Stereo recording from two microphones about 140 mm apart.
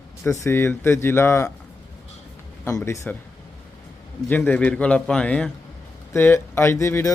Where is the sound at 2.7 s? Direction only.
20° left (ahead or behind).